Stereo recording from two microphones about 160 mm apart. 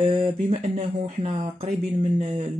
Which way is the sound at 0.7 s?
35° right (ahead or behind).